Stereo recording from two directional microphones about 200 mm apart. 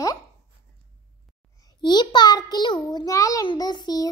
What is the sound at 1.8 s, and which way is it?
A child's voice, 20° left (ahead or behind).